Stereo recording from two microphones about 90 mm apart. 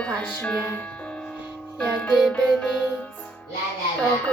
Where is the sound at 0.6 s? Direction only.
20° left (ahead or behind).